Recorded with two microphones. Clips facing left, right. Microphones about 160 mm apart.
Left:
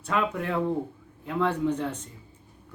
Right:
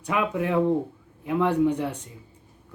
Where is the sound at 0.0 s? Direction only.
15° right (ahead or behind).